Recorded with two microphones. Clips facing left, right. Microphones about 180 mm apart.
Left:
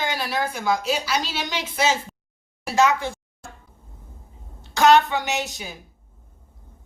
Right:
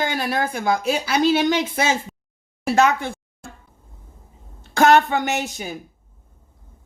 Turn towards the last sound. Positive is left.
turn(degrees=-50)  # may be behind; listen again after turning